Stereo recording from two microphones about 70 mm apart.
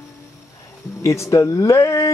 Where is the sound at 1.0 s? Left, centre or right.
Left.